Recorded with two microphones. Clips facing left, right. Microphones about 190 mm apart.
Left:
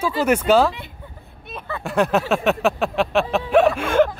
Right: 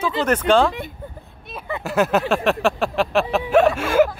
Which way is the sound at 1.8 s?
Centre (ahead or behind).